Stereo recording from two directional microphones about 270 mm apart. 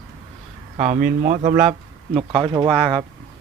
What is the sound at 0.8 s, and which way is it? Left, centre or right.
Speech, right.